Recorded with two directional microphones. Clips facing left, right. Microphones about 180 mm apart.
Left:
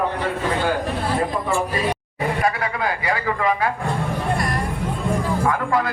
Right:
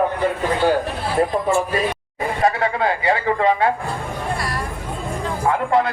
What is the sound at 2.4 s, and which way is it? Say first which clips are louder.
A man's voice: right 6 dB; 25° right (ahead or behind).